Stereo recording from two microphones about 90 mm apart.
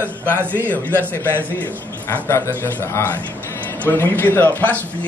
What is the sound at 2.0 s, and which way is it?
Speech, 30° left (ahead or behind).